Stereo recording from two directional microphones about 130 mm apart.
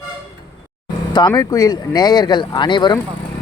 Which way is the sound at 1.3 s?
25° left (ahead or behind).